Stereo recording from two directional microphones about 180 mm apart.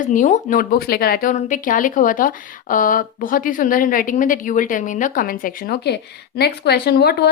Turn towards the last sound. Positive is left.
turn(degrees=65)  # may be behind; listen again after turning